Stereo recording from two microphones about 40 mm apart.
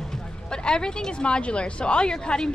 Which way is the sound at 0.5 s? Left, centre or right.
Left.